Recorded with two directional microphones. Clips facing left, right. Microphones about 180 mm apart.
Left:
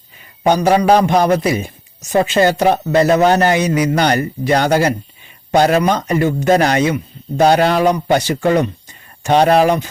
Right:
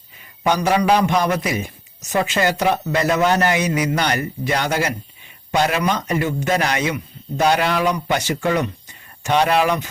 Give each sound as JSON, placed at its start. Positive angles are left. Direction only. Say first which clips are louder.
{"t": 0.4, "sound": "a man's voice", "louder": "left 5 dB", "side_deg": 35}